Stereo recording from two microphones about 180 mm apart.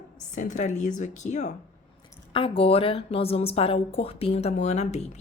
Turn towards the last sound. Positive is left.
turn(degrees=40)  # may be behind; listen again after turning